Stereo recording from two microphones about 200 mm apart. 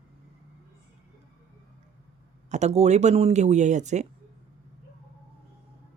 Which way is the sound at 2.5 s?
35° right (ahead or behind).